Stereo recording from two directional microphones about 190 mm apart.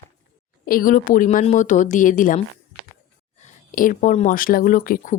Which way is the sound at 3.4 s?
45° left (ahead or behind).